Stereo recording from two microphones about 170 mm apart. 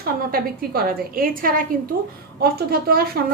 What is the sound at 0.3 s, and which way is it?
A woman's voice, 60° right (ahead or behind).